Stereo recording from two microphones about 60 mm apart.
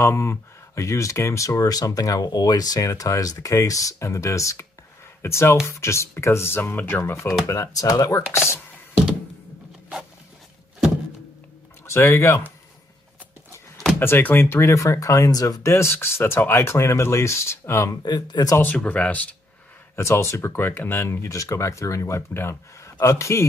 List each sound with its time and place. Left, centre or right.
0.0 s speech: left
7.4 s speech: left
8.3 s speech: left
11.8 s speech: left
13.9 s speech: left
15.6 s speech: left
18.6 s speech: left
20.0 s speech: left
22.3 s speech: left